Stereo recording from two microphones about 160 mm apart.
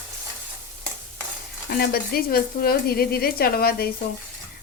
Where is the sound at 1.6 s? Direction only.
70° left (ahead or behind).